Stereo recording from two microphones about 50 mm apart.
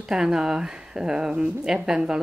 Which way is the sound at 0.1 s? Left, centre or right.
Centre.